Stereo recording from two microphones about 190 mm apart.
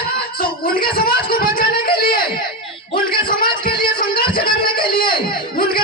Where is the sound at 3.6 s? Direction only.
25° left (ahead or behind).